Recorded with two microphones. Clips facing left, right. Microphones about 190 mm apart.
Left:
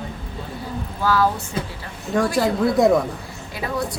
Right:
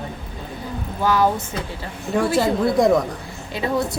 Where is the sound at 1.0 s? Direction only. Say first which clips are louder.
Right 1 dB; 20° right (ahead or behind).